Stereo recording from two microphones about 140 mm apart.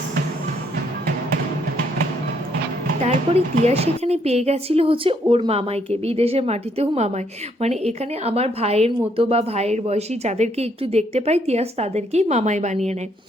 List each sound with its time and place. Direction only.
3.0 s a woman's voice: 55° right (ahead or behind)